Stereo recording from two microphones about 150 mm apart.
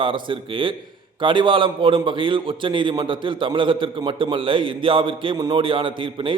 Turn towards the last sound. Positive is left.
turn(degrees=-35)  # may be behind; listen again after turning